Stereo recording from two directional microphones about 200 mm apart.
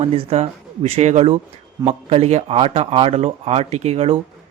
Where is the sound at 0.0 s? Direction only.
30° right (ahead or behind).